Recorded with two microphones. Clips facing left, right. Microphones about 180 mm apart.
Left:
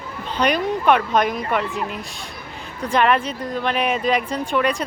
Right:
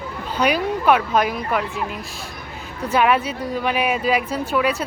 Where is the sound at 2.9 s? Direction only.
5° right (ahead or behind).